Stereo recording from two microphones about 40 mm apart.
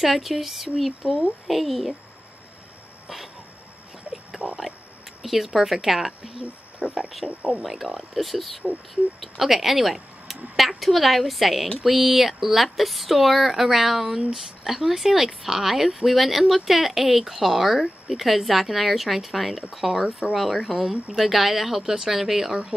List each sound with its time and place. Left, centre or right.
0.0 s a woman's voice: centre
5.2 s a woman's voice: centre
21.8 s speech: centre
22.1 s speech: centre